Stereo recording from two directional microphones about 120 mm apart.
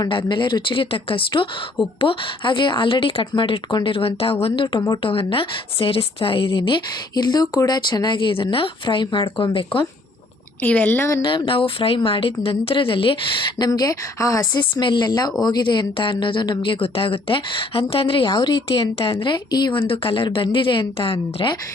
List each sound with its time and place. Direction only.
0.0 s speech: 40° left (ahead or behind)
10.6 s speech: 15° left (ahead or behind)
11.2 s speech: 40° left (ahead or behind)
13.6 s speech: 30° left (ahead or behind)
19.8 s speech: 50° left (ahead or behind)